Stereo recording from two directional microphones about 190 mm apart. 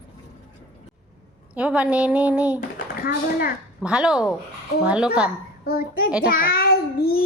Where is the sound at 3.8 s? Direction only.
5° right (ahead or behind).